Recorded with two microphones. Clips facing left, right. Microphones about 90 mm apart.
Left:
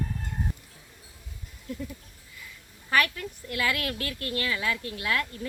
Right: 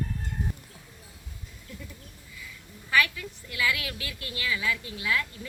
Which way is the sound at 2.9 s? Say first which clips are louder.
Even; 50° left (ahead or behind).